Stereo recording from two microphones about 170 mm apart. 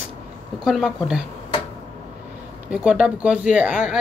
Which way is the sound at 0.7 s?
Centre (ahead or behind).